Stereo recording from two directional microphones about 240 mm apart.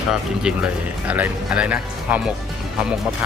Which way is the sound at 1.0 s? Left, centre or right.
Centre.